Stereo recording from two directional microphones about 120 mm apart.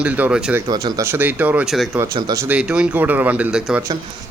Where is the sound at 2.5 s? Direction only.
10° right (ahead or behind).